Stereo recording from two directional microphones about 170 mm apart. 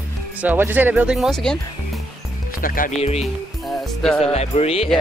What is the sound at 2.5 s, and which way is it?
Speech, 55° left (ahead or behind).